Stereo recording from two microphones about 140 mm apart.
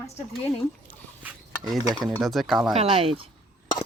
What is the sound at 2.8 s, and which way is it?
Speech, 40° right (ahead or behind).